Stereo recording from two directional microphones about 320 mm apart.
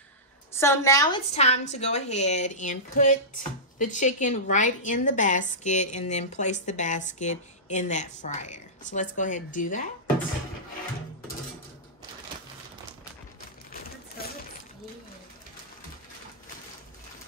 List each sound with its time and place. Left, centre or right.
0.5 s a woman's voice: centre; by 9.8 s left